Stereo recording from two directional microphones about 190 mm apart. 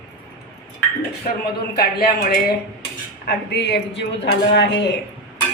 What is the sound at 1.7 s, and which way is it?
Speech, 55° left (ahead or behind).